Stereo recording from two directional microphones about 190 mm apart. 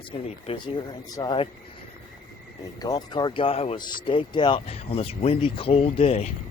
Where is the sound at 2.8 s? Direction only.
20° left (ahead or behind).